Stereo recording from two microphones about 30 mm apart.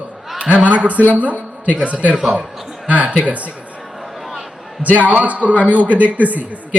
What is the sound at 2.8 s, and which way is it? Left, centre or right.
Speech, right.